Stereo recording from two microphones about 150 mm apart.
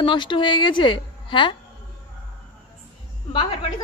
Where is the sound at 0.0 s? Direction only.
30° left (ahead or behind).